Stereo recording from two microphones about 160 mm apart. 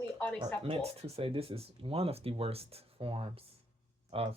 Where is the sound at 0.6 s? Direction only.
40° right (ahead or behind).